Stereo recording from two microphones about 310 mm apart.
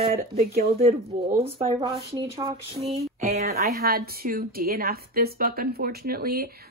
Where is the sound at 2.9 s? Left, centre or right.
Right.